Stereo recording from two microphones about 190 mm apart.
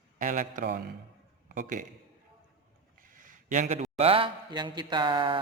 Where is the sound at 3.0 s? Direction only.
45° right (ahead or behind).